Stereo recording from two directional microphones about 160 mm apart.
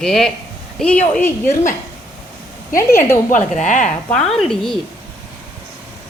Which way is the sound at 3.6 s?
50° left (ahead or behind).